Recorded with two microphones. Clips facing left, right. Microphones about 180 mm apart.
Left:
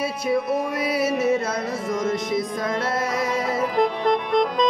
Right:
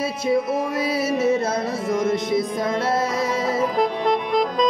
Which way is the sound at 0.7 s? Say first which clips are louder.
Right 1 dB; 25° right (ahead or behind).